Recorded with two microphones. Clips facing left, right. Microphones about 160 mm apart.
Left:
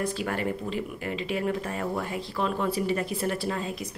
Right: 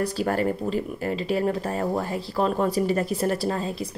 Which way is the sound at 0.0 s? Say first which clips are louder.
Right 5 dB; 40° right (ahead or behind).